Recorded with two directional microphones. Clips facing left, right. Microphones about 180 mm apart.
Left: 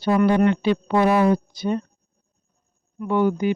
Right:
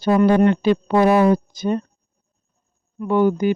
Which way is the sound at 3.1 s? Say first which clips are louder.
Right 3 dB; 40° right (ahead or behind).